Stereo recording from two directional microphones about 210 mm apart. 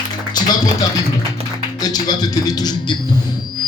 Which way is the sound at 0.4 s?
20° left (ahead or behind).